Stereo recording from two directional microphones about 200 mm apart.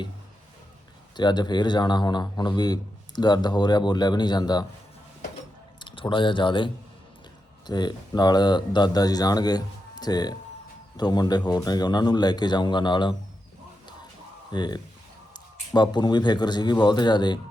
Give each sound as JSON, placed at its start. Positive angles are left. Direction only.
{"t": 1.1, "sound": "a man's voice", "side_deg": 20}
{"t": 5.8, "sound": "speech", "side_deg": 25}
{"t": 7.7, "sound": "a man's voice", "side_deg": 20}
{"t": 14.5, "sound": "a man's voice", "side_deg": 20}